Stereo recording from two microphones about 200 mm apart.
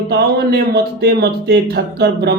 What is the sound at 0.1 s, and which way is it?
Speech, 55° right (ahead or behind).